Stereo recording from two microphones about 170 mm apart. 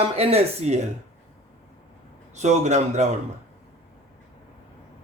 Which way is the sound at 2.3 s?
45° right (ahead or behind).